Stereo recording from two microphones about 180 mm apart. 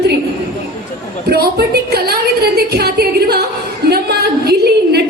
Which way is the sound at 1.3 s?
60° right (ahead or behind).